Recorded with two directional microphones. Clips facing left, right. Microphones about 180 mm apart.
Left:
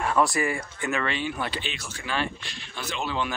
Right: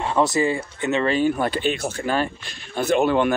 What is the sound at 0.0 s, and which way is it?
Speech, 25° right (ahead or behind).